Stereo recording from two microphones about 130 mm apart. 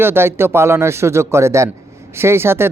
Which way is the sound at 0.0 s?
20° right (ahead or behind).